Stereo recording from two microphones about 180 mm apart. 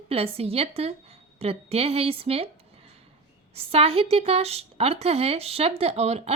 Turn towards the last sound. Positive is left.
turn(degrees=-35)  # may be behind; listen again after turning